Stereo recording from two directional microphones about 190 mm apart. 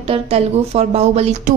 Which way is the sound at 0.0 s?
30° right (ahead or behind).